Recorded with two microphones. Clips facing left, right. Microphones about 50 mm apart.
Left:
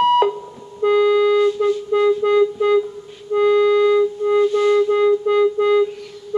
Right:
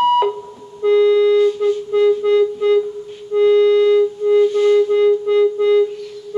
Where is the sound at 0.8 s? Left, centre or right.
Centre.